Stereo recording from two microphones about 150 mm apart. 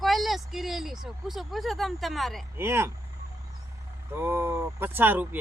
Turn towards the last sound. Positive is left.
turn(degrees=-10)  # may be behind; listen again after turning